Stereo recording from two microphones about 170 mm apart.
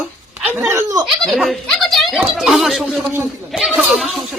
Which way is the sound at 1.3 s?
Centre (ahead or behind).